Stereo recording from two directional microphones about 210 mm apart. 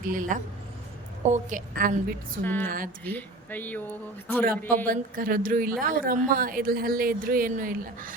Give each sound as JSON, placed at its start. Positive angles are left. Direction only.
{"t": 0.1, "sound": "a woman's voice", "side_deg": -40}
{"t": 2.4, "sound": "speech", "side_deg": 10}
{"t": 2.6, "sound": "speech", "side_deg": -40}
{"t": 3.2, "sound": "speech", "side_deg": 10}
{"t": 4.9, "sound": "a woman's voice", "side_deg": -40}